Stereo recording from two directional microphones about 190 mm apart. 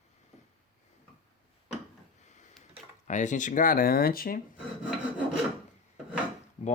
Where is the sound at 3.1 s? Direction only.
40° left (ahead or behind).